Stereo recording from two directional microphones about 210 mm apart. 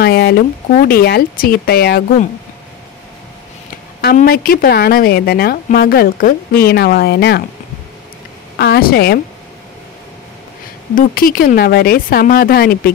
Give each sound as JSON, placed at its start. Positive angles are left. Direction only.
{"t": 0.0, "sound": "a woman's voice", "side_deg": 50}
{"t": 4.0, "sound": "a woman's voice", "side_deg": 45}
{"t": 8.5, "sound": "a woman's voice", "side_deg": 50}
{"t": 11.0, "sound": "a woman's voice", "side_deg": 45}